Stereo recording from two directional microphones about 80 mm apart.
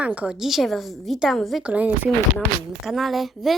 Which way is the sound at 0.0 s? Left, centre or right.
Centre.